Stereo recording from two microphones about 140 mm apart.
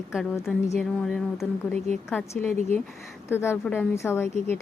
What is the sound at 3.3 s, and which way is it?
A woman's voice, 15° left (ahead or behind).